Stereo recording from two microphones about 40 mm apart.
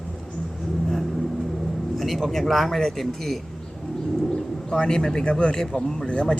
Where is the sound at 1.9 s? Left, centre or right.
Centre.